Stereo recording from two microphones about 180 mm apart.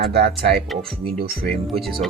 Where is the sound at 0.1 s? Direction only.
60° right (ahead or behind).